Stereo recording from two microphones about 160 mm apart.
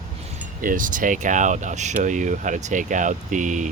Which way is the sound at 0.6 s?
55° right (ahead or behind).